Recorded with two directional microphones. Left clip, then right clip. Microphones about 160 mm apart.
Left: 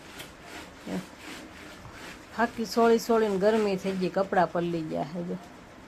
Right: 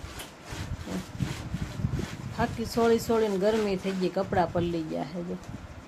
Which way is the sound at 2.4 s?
15° left (ahead or behind).